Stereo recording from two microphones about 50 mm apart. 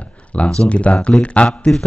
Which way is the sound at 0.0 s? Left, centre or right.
Left.